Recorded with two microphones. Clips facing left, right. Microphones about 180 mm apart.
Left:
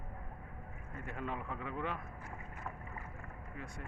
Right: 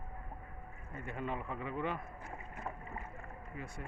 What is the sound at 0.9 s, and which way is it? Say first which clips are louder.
Speech: right 2 dB; centre (ahead or behind).